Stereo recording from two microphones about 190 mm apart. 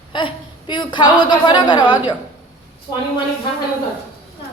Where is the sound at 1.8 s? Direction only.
10° right (ahead or behind).